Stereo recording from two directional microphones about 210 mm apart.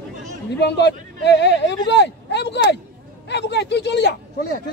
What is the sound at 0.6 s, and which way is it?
A man's voice, 55° left (ahead or behind).